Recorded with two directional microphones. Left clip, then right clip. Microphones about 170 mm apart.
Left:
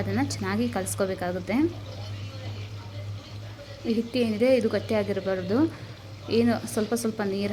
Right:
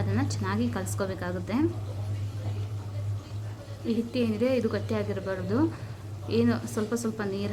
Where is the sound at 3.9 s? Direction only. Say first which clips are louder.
Left 3 dB; 25° left (ahead or behind).